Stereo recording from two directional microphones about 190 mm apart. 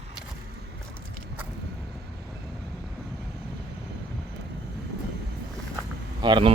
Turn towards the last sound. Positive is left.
turn(degrees=-25)  # may be behind; listen again after turning